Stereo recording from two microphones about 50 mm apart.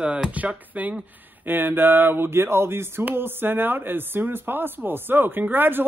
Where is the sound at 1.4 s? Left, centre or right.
Right.